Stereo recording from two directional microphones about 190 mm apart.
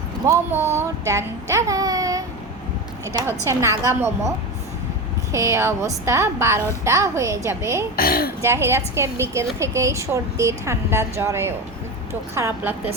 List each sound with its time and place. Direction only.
0.3 s a woman's voice: 10° right (ahead or behind)
5.3 s a woman's voice: 15° right (ahead or behind)
7.9 s speech: 50° left (ahead or behind)
8.4 s a woman's voice: 15° right (ahead or behind)